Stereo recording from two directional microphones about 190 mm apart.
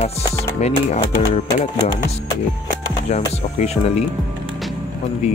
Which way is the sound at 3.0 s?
35° left (ahead or behind).